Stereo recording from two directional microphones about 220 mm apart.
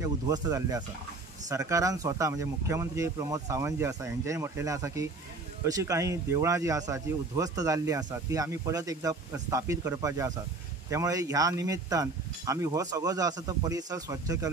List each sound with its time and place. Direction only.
0.0 s speech: 15° right (ahead or behind)